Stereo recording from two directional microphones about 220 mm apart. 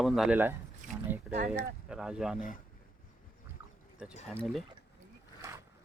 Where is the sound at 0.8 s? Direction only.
35° right (ahead or behind).